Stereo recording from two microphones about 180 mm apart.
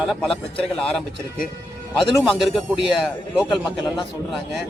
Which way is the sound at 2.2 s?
Centre (ahead or behind).